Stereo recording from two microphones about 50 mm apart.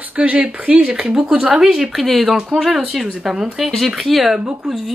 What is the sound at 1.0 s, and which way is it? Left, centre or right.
Speech, centre.